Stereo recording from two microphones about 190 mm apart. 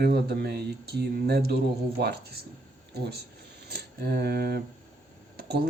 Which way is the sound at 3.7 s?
55° right (ahead or behind).